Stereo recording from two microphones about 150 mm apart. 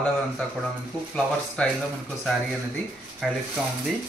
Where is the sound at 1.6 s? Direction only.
5° left (ahead or behind).